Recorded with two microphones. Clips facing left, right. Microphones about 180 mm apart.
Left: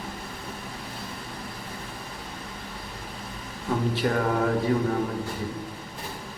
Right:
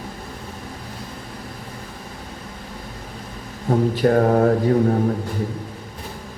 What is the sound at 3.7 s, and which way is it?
Mantra, 45° right (ahead or behind).